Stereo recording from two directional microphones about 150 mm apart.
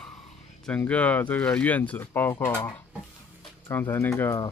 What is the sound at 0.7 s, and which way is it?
Speech, 10° left (ahead or behind).